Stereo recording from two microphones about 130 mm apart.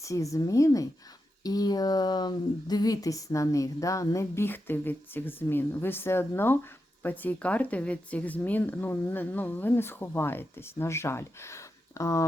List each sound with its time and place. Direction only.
0.0 s speech: 25° left (ahead or behind)